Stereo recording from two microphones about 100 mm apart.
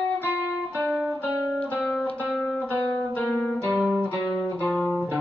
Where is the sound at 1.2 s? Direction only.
15° left (ahead or behind).